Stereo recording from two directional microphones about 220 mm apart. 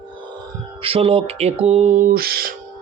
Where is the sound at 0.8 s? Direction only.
25° right (ahead or behind); by 2.5 s 45° right (ahead or behind).